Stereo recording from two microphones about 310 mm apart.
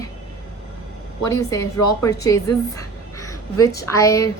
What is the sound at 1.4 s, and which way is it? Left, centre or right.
A woman's voice, centre.